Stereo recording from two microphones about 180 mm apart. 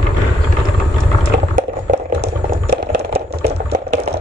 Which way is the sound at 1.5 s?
50° right (ahead or behind).